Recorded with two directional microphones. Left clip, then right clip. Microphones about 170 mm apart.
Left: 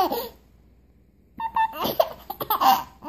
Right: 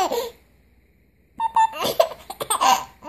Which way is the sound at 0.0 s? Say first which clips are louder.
Right 1 dB; 15° right (ahead or behind).